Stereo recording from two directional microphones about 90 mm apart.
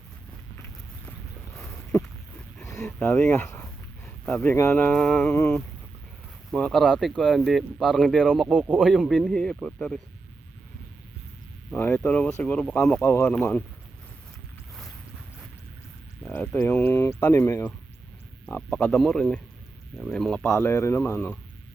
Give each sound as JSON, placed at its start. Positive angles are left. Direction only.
{"t": 1.9, "sound": "a sound", "side_deg": 30}
{"t": 2.7, "sound": "a sound", "side_deg": 5}
{"t": 3.1, "sound": "speech", "side_deg": 20}
{"t": 3.6, "sound": "a sound", "side_deg": 10}
{"t": 4.7, "sound": "a man's voice", "side_deg": 20}
{"t": 5.3, "sound": "speech", "side_deg": 30}
{"t": 6.5, "sound": "a man's voice", "side_deg": 5}
{"t": 11.7, "sound": "a man's voice", "side_deg": 20}
{"t": 13.0, "sound": "speech", "side_deg": 30}
{"t": 16.2, "sound": "speech", "side_deg": 15}
{"t": 18.5, "sound": "a man's voice", "side_deg": 15}
{"t": 20.4, "sound": "speech", "side_deg": 30}